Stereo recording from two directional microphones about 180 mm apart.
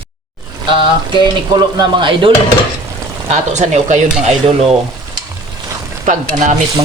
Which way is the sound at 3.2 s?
40° right (ahead or behind).